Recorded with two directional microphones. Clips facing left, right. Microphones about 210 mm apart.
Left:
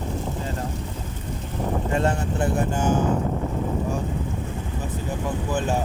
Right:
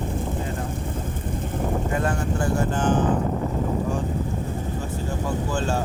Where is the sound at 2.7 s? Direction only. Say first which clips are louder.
Right 1 dB; 10° left (ahead or behind).